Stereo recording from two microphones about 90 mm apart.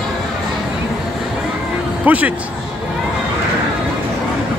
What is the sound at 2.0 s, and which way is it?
Speech, 15° right (ahead or behind).